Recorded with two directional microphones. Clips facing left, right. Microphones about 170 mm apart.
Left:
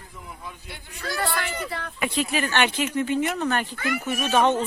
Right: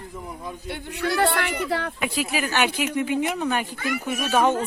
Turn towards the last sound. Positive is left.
turn(degrees=-10)  # may be behind; listen again after turning